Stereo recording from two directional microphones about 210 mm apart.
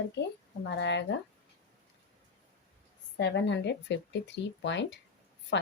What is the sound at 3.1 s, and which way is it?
Speech, 55° left (ahead or behind).